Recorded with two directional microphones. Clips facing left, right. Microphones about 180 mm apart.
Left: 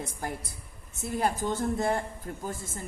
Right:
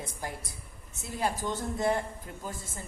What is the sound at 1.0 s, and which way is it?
A woman's voice, 55° left (ahead or behind).